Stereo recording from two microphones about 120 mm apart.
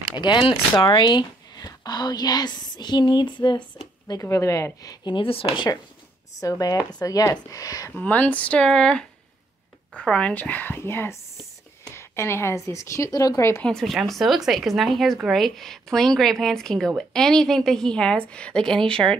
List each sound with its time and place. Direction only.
0.2 s speech: 40° left (ahead or behind)
4.2 s a woman's voice: 25° left (ahead or behind)
5.0 s speech: 45° left (ahead or behind)
6.4 s a woman's voice: 30° left (ahead or behind)
7.9 s a woman's voice: 15° left (ahead or behind)
13.6 s a woman's voice: 5° left (ahead or behind)